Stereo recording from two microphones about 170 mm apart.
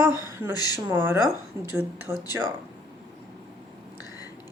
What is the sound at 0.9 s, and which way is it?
Speech, 15° right (ahead or behind).